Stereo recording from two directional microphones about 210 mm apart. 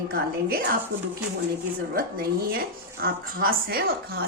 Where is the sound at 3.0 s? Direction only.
45° right (ahead or behind).